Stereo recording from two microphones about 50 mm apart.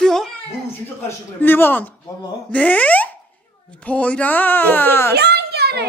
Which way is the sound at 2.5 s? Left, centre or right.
Left.